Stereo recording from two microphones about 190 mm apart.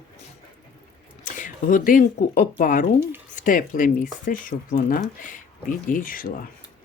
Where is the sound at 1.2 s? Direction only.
45° left (ahead or behind).